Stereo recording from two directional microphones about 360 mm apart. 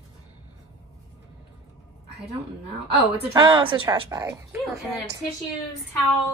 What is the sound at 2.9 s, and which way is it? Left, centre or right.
A woman's voice, centre.